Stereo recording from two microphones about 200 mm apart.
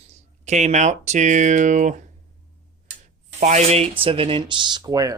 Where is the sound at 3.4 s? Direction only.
35° right (ahead or behind); by 5.2 s 15° right (ahead or behind).